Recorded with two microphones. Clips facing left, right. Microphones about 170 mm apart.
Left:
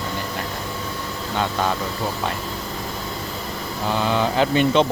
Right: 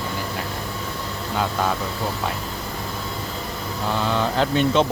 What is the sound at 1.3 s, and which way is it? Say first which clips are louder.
Speech: left 1 dB; 5° right (ahead or behind).